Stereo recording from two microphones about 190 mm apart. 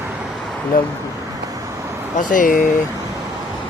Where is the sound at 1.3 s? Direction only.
15° right (ahead or behind).